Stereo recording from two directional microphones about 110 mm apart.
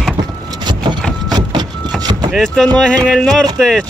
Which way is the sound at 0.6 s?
45° right (ahead or behind).